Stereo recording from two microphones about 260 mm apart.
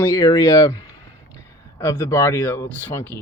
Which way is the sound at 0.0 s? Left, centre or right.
Centre.